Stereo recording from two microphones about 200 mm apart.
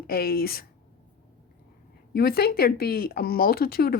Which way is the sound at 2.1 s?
50° left (ahead or behind).